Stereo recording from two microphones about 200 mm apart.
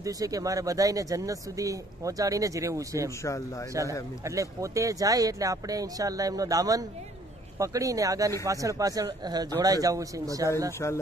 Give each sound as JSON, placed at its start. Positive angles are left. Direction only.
{"t": 0.0, "sound": "speech", "side_deg": -15}
{"t": 4.2, "sound": "speech", "side_deg": -15}